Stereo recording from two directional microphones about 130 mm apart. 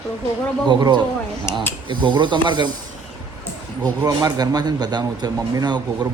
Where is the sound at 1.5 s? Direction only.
20° left (ahead or behind).